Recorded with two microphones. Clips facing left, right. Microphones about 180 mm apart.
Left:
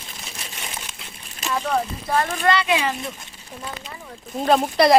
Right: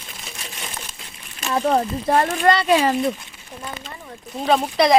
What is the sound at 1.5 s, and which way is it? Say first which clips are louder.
Speech: right 4 dB; 40° right (ahead or behind).